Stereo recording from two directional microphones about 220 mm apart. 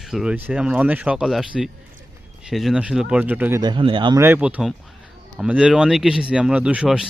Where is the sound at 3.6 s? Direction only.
20° right (ahead or behind).